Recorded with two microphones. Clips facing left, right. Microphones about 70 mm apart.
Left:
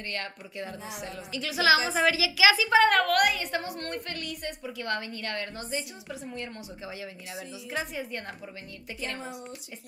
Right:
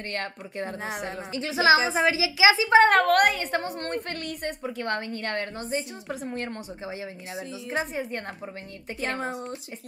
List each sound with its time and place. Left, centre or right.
0.1 s a woman's voice: right
1.3 s a woman's voice: right
6.9 s a woman's voice: right